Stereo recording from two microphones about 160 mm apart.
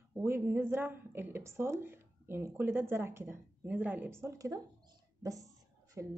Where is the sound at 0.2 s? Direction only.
15° right (ahead or behind).